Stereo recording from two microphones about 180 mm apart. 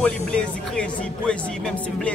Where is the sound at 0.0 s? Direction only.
5° left (ahead or behind).